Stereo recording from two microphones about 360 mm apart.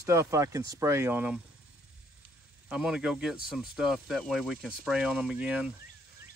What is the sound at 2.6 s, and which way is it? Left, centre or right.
Speech, centre.